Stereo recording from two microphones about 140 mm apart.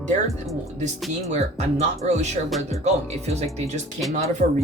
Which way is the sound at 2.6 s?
50° right (ahead or behind).